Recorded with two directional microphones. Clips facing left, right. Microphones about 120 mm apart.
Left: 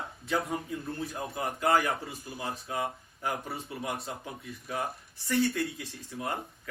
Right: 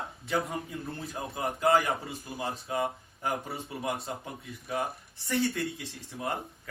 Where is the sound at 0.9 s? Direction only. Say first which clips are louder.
Left 1 dB; 25° right (ahead or behind).